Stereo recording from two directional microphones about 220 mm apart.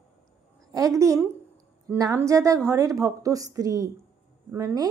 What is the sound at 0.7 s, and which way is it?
A woman's voice, 15° right (ahead or behind).